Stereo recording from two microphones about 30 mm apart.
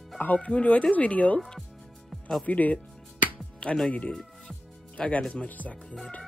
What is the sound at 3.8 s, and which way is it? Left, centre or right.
Speech, left.